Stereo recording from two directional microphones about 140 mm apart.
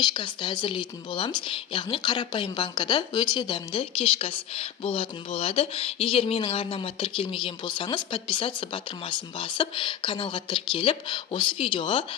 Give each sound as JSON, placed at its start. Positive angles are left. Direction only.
{"t": 0.1, "sound": "speech", "side_deg": 35}